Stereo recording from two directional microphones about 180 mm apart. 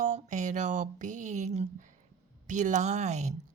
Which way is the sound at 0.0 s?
45° right (ahead or behind).